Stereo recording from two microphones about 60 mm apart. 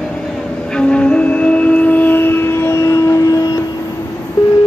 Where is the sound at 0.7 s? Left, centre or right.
Centre; by 3.5 s left.